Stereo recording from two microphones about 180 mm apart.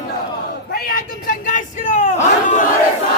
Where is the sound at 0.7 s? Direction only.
55° left (ahead or behind); by 2.1 s 40° left (ahead or behind).